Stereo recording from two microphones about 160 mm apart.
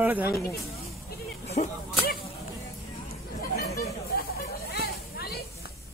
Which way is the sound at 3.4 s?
70° left (ahead or behind).